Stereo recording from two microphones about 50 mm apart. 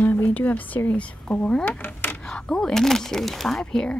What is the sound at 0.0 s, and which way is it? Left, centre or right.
A woman's voice, left.